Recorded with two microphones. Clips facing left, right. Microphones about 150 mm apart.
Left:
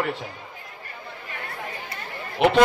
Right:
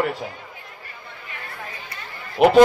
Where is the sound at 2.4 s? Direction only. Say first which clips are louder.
Right 4 dB; 45° right (ahead or behind).